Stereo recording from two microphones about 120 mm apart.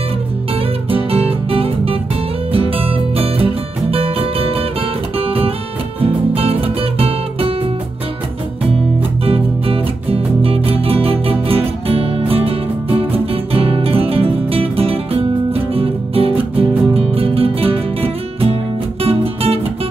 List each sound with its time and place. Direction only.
0.8 s music: 55° right (ahead or behind)
5.1 s guitar: 55° right (ahead or behind)
5.9 s music: 55° right (ahead or behind)
9.2 s music: 55° right (ahead or behind)